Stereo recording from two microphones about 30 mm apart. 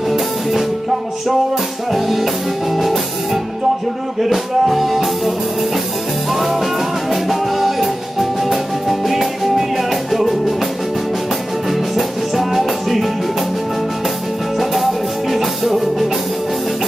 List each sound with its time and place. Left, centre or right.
0.1 s music: centre
1.9 s music: centre
4.2 s music: centre
12.0 s music: centre
14.6 s music: centre